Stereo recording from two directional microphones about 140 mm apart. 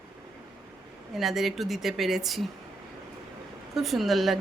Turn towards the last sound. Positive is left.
turn(degrees=0)  # may be behind; listen again after turning